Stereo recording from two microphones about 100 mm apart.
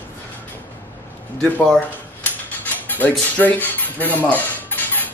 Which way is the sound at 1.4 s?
5° left (ahead or behind).